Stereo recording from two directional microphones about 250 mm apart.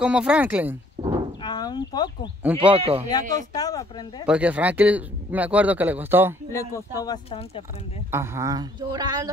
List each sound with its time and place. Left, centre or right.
0.0 s speech: centre
1.0 s livestock: centre
1.4 s a sound: centre
2.7 s speech: right
3.1 s speech: centre
4.3 s speech: centre
6.5 s speech: centre
8.1 s speech: centre